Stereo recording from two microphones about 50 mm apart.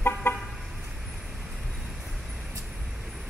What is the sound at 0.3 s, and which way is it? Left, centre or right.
Vehicle, left.